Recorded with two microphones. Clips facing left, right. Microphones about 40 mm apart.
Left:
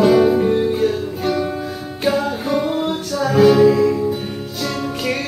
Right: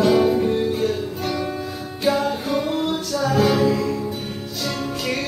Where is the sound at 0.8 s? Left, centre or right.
Centre.